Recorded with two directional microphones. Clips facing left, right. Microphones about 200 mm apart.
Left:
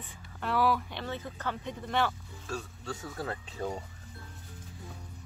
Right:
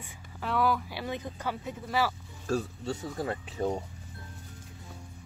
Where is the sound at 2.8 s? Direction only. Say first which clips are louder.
Right 4 dB; 20° right (ahead or behind).